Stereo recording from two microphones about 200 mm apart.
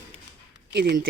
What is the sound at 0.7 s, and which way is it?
Speech, 50° right (ahead or behind).